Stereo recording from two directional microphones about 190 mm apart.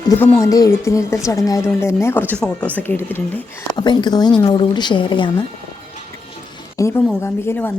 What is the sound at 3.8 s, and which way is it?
Speech, 25° left (ahead or behind).